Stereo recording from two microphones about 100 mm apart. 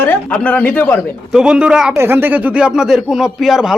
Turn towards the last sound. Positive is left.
turn(degrees=-5)  # may be behind; listen again after turning